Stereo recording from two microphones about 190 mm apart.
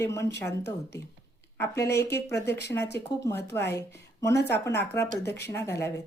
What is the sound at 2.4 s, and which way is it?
Speech, 60° left (ahead or behind).